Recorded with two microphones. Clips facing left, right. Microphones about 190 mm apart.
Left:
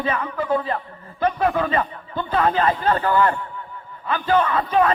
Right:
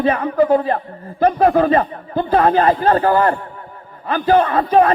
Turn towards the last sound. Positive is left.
turn(degrees=-40)  # may be behind; listen again after turning